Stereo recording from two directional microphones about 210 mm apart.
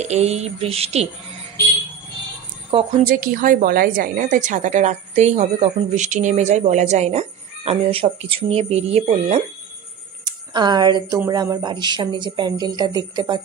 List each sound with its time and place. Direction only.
0.0 s a woman's voice: 30° right (ahead or behind)
2.7 s speech: 25° right (ahead or behind)
3.1 s a woman's voice: 40° right (ahead or behind); by 13.4 s 20° right (ahead or behind)